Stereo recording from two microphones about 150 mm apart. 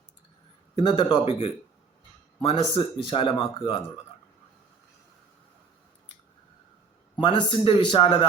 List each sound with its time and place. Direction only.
0.8 s speech: 35° left (ahead or behind)
7.2 s speech: 35° left (ahead or behind)